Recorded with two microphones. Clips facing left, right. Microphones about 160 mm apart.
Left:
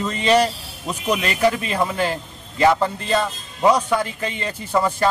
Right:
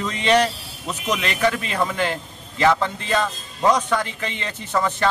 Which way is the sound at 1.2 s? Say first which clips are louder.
Left 2 dB; 35° left (ahead or behind).